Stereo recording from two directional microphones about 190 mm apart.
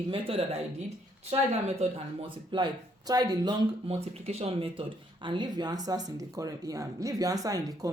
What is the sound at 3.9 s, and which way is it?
Speech, 35° right (ahead or behind).